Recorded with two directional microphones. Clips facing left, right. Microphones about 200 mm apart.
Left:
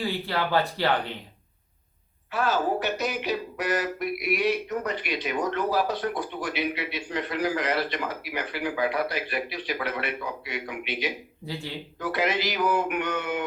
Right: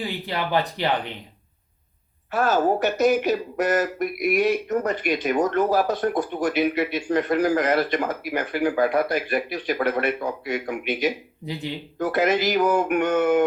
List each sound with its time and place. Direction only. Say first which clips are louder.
0.0 s speech: even; 20° right (ahead or behind)
2.3 s speech: right 5 dB; 45° right (ahead or behind)
11.4 s speech: right 4 dB; 20° right (ahead or behind)
11.9 s speech: right 6 dB; 45° right (ahead or behind)